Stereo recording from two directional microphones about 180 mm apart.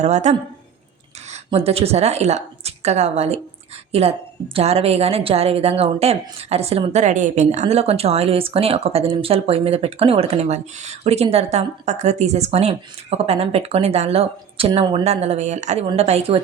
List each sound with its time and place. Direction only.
0.0 s a woman's voice: 40° right (ahead or behind)
1.5 s a woman's voice: 35° right (ahead or behind)